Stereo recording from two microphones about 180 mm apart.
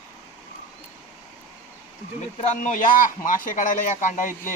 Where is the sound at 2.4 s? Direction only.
45° left (ahead or behind).